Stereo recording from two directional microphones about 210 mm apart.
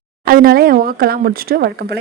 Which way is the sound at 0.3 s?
45° right (ahead or behind).